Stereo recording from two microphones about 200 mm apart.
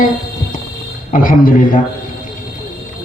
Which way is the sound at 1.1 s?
45° left (ahead or behind).